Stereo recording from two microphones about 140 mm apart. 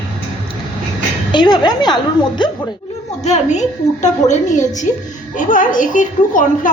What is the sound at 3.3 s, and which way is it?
A woman's voice, 60° left (ahead or behind).